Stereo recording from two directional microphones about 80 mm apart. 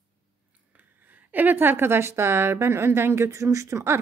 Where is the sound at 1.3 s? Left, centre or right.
Right.